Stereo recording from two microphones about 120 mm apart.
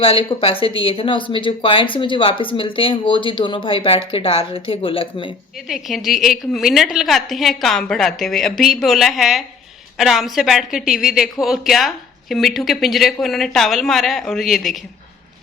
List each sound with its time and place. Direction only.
0.0 s speech: 45° left (ahead or behind)
5.6 s speech: centre (ahead or behind)